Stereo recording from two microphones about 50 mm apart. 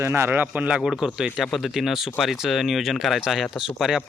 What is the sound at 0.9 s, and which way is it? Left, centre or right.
Speech, centre.